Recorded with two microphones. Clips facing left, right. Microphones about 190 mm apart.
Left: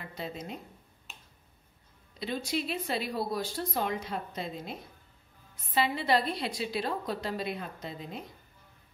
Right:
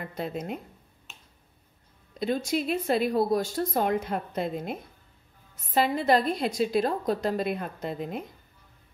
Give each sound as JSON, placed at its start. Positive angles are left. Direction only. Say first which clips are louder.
{"t": 0.0, "sound": "speech", "louder": "right 6 dB", "side_deg": -55}
{"t": 2.1, "sound": "speech", "louder": "right 6 dB", "side_deg": -50}
{"t": 5.8, "sound": "speech", "louder": "right 5 dB", "side_deg": -45}